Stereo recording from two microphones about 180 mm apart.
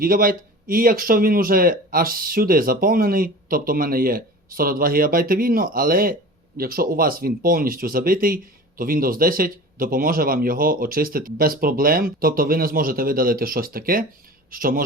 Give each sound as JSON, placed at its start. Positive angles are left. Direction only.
{"t": 0.0, "sound": "speech", "side_deg": -55}